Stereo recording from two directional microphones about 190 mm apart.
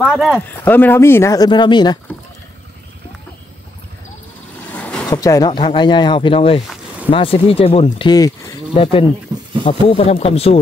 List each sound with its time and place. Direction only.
0.0 s speech: centre (ahead or behind); by 2.0 s 25° left (ahead or behind)
4.7 s a sound: 5° left (ahead or behind)
5.1 s speech: 20° left (ahead or behind)